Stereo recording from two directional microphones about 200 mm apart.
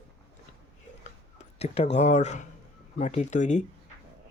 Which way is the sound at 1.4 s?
30° left (ahead or behind).